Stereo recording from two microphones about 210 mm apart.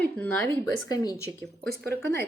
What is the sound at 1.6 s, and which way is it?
Speech, 50° right (ahead or behind).